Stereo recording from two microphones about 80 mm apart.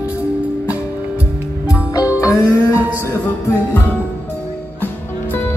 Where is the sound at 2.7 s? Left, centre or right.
Right.